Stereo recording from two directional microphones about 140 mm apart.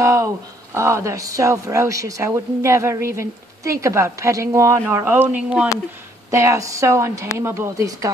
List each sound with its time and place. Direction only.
0.0 s a sound: 20° right (ahead or behind)
0.7 s speech: 20° right (ahead or behind)
6.3 s speech: 20° right (ahead or behind)